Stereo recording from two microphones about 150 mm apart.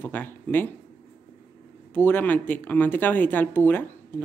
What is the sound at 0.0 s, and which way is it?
Speech, 10° left (ahead or behind).